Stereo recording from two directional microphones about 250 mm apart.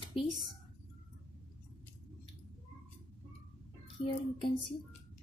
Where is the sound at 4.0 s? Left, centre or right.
Left.